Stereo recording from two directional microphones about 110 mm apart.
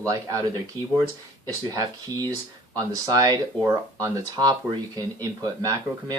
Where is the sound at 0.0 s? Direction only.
30° right (ahead or behind).